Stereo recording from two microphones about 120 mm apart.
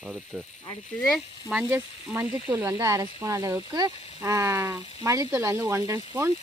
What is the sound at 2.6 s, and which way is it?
Speech, 20° right (ahead or behind).